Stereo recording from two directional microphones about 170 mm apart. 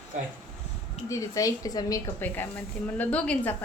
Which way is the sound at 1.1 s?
20° left (ahead or behind).